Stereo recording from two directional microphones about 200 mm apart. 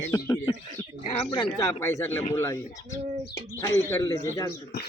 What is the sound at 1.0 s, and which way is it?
Speech, 30° left (ahead or behind).